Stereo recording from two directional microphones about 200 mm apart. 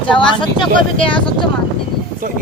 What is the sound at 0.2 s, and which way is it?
Speech, 25° left (ahead or behind).